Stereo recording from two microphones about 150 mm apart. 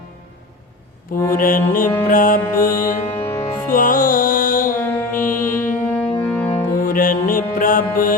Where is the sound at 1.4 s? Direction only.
65° left (ahead or behind).